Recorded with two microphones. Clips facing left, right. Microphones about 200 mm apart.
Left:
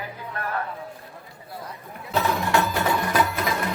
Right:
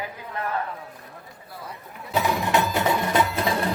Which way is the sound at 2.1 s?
15° right (ahead or behind).